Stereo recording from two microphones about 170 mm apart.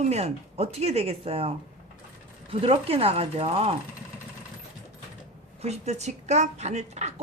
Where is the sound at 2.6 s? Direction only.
35° right (ahead or behind).